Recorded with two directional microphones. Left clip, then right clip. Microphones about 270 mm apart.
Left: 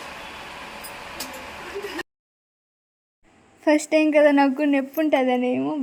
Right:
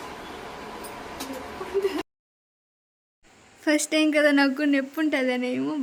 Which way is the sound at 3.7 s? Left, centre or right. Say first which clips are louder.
Left 4 dB; centre.